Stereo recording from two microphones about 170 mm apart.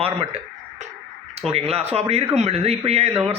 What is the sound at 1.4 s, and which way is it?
A man's voice, 35° right (ahead or behind).